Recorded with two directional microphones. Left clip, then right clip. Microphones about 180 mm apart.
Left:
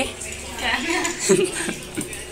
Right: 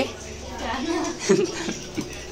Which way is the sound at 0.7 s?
Centre (ahead or behind).